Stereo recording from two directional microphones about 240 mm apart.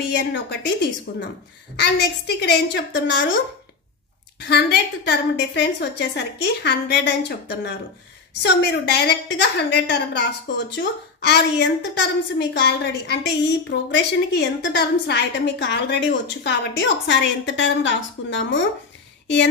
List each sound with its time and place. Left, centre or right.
0.1 s a woman's voice: left
4.5 s a woman's voice: left